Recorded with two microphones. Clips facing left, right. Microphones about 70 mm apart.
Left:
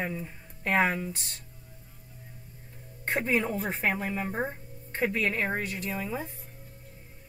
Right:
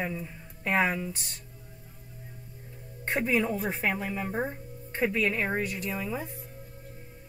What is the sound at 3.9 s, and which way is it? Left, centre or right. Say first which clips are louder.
Speech: left 3 dB; left.